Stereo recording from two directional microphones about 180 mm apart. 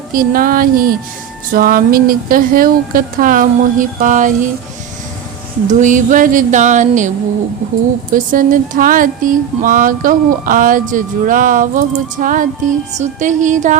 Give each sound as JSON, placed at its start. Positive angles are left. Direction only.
{"t": 0.1, "sound": "speech", "side_deg": -50}
{"t": 5.6, "sound": "speech", "side_deg": -45}
{"t": 8.1, "sound": "speech", "side_deg": -45}